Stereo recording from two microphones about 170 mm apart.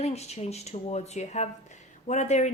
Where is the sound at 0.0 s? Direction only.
40° left (ahead or behind).